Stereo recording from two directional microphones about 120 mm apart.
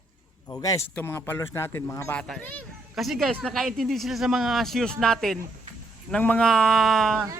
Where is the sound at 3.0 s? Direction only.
Centre (ahead or behind).